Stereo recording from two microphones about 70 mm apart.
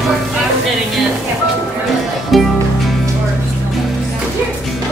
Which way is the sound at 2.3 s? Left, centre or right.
Centre.